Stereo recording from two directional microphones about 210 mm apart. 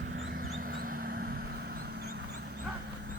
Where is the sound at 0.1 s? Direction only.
55° right (ahead or behind).